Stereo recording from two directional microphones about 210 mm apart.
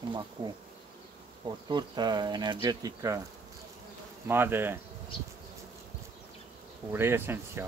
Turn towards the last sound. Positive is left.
turn(degrees=-10)  # may be behind; listen again after turning